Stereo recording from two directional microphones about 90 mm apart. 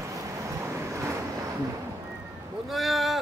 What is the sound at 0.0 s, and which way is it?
Vehicle, 35° right (ahead or behind).